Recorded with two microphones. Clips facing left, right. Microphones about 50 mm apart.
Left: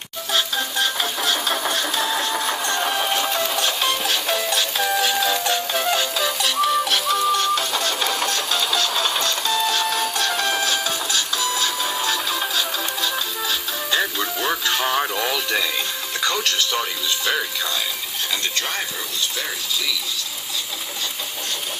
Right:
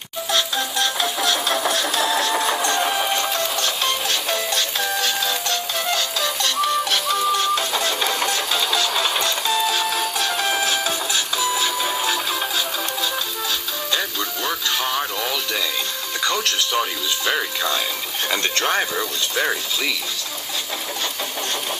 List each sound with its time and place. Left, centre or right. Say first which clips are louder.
0.3 s music: even; centre
2.3 s engine: right 3 dB; centre
2.6 s music: right 2 dB; centre
16.2 s music: even; centre
17.2 s speech: right 2 dB; centre
18.3 s speech: right 5 dB; right